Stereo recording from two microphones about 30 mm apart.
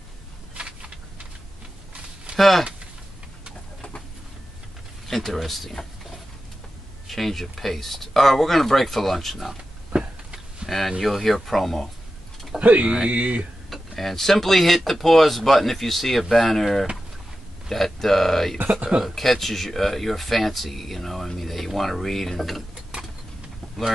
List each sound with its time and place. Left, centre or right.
0.6 s a sound: right
2.3 s speech: centre
5.0 s speech: centre
7.1 s speech: centre
9.9 s a sound: centre
10.7 s speech: centre
13.1 s speech: right
13.7 s speech: centre
21.4 s stir: centre